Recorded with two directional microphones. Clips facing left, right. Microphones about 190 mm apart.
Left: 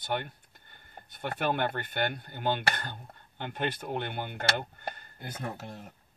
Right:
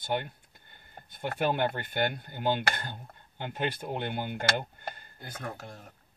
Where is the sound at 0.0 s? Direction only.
10° right (ahead or behind).